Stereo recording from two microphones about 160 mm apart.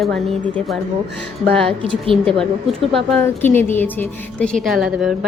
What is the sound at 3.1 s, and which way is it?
A woman's voice, 10° left (ahead or behind).